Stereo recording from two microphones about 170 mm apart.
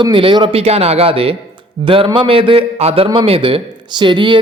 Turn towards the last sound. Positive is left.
turn(degrees=-30)  # may be behind; listen again after turning